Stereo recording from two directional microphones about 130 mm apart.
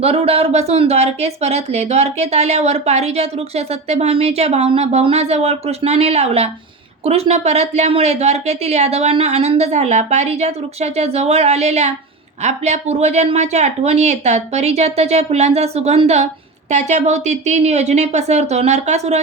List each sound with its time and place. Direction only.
0.0 s speech: 50° right (ahead or behind)